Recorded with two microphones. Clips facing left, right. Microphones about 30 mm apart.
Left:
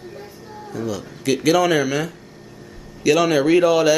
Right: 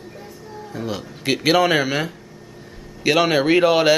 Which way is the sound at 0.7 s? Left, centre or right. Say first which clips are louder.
Left 2 dB; right.